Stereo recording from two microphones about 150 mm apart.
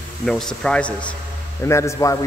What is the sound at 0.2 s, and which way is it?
Speech, 5° left (ahead or behind).